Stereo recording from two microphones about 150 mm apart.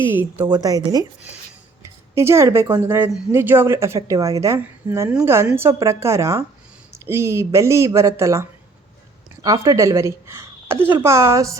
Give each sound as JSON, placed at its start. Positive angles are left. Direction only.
{"t": 0.1, "sound": "speech", "side_deg": -15}
{"t": 0.4, "sound": "a woman's voice", "side_deg": -25}